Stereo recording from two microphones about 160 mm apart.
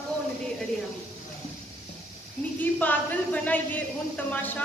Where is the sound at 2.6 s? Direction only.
10° left (ahead or behind).